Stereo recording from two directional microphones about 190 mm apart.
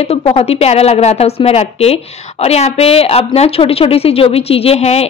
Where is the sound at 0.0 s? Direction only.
30° left (ahead or behind).